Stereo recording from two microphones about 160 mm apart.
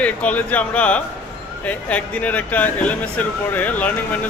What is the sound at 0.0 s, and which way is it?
Speech, 10° left (ahead or behind).